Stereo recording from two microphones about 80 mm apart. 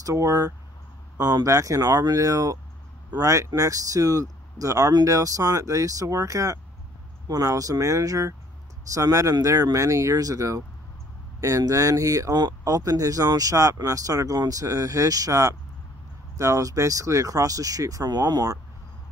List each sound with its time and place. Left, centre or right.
0.0 s speech: right
1.1 s speech: right